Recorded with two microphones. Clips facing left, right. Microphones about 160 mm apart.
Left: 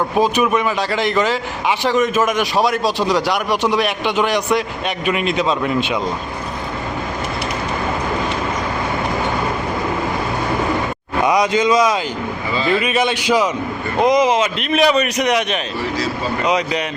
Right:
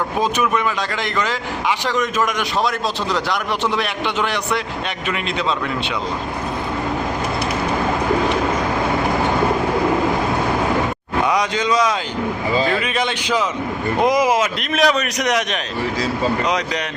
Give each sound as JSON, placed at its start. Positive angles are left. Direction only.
{"t": 0.2, "sound": "a man's voice", "side_deg": 20}
{"t": 11.3, "sound": "a man's voice", "side_deg": 10}
{"t": 14.0, "sound": "speech", "side_deg": -5}
{"t": 14.8, "sound": "speech", "side_deg": 5}